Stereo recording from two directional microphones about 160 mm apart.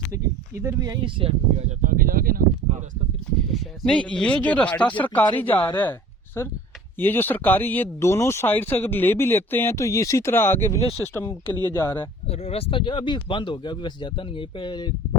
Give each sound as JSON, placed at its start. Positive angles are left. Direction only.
{"t": 0.6, "sound": "speech", "side_deg": -20}
{"t": 1.2, "sound": "speech", "side_deg": -45}
{"t": 3.5, "sound": "speech", "side_deg": 5}
{"t": 12.3, "sound": "speech", "side_deg": 40}